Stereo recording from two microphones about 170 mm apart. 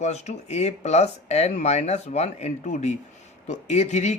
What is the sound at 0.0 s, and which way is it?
A man's voice, 40° left (ahead or behind).